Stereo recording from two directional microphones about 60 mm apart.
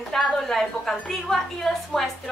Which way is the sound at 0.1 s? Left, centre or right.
Centre.